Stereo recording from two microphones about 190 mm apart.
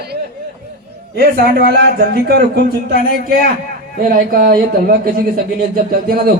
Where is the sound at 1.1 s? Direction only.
55° right (ahead or behind).